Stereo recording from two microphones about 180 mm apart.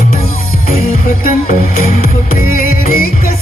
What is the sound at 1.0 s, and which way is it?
Music, 55° left (ahead or behind).